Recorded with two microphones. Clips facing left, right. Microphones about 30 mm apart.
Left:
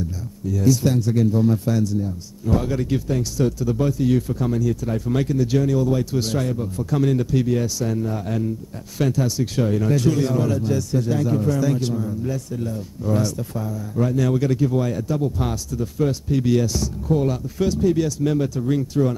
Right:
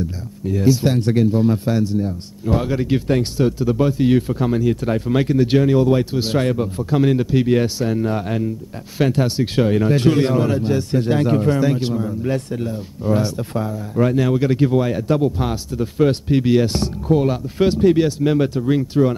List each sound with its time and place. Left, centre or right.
0.5 s speech: right
6.1 s speech: right
6.4 s speech: right
6.9 s speech: right
7.4 s speech: right
11.7 s speech: right
12.2 s speech: right
12.6 s speech: right
13.5 s speech: right
15.0 s speech: right
15.3 s speech: right
17.1 s speech: right